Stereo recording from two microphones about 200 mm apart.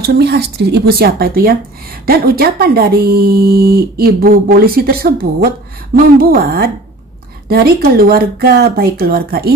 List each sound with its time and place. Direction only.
0.0 s speech: 55° right (ahead or behind)